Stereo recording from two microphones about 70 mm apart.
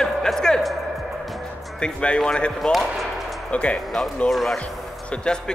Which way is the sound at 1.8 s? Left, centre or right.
Centre.